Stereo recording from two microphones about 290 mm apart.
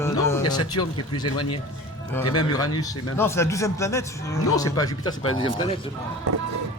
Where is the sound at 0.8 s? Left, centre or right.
Left.